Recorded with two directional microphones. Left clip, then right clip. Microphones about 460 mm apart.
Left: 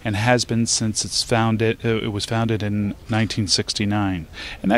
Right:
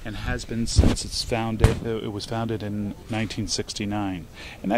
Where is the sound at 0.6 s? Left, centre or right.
Left.